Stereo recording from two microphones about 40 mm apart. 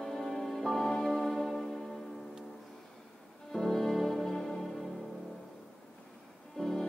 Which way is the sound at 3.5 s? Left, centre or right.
Centre.